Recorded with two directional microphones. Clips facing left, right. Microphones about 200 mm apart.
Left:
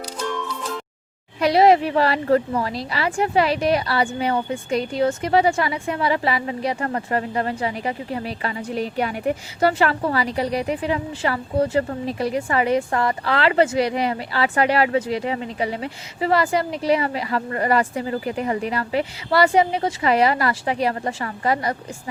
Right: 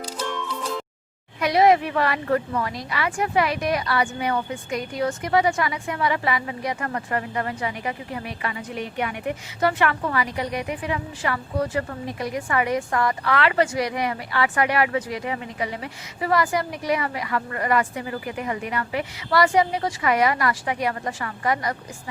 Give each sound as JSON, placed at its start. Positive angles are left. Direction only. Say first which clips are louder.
{"t": 1.4, "sound": "a woman's voice", "louder": "left 3 dB", "side_deg": 30}